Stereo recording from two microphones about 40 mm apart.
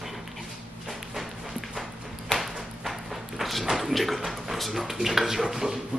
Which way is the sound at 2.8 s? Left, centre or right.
Centre.